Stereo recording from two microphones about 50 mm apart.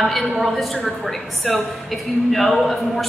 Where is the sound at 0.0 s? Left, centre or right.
Centre.